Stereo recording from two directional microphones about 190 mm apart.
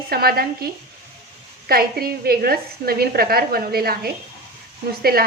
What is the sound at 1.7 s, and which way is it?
A woman's voice, 50° right (ahead or behind).